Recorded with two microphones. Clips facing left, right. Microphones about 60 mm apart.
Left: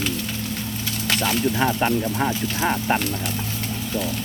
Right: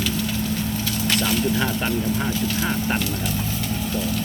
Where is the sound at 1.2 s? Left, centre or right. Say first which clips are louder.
Left 3 dB; centre.